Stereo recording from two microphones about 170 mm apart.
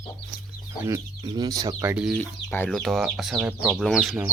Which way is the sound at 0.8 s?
20° right (ahead or behind).